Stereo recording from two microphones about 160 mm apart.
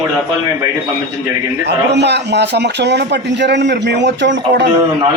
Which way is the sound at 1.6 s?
90° right.